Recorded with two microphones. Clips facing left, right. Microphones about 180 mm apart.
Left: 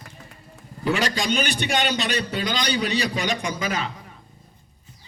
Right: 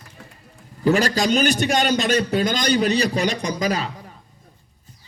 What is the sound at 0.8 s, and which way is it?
A man's voice, 40° right (ahead or behind).